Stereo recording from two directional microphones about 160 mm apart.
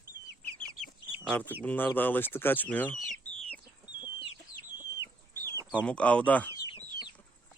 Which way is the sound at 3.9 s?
30° left (ahead or behind).